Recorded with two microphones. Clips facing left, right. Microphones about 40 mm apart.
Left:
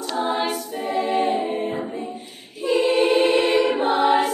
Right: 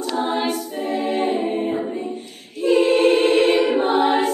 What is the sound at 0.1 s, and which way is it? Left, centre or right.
Choir, centre.